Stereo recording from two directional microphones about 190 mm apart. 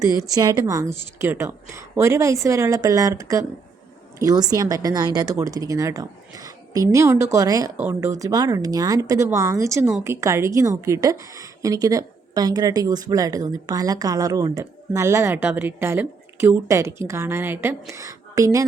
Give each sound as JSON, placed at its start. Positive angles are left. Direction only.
{"t": 0.0, "sound": "a woman's voice", "side_deg": -20}